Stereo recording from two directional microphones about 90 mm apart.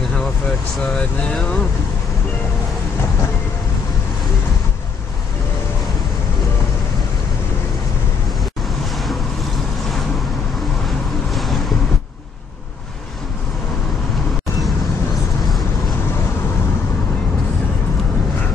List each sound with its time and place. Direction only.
0.9 s speech: 10° left (ahead or behind)
11.3 s waves: centre (ahead or behind)